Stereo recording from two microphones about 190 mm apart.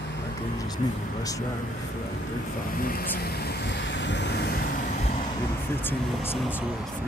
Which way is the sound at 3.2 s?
55° left (ahead or behind).